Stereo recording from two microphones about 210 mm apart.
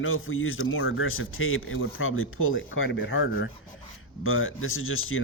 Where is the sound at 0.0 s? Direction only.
75° left (ahead or behind).